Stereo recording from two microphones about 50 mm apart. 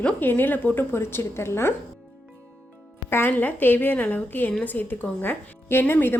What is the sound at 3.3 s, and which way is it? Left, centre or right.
A woman's voice, left.